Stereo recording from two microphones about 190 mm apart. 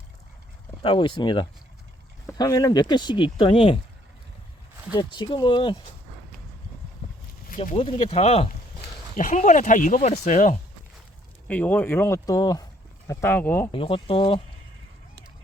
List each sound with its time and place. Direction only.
0.8 s speech: 25° left (ahead or behind)
4.9 s speech: 25° left (ahead or behind)
7.5 s speech: 40° left (ahead or behind)
7.8 s speech: 30° left (ahead or behind)
11.4 s speech: 10° left (ahead or behind)
13.7 s speech: 30° left (ahead or behind)